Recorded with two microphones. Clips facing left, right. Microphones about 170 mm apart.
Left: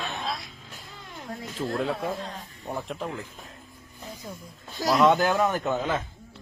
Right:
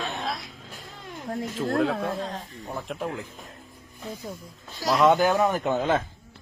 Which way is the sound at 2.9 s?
5° right (ahead or behind).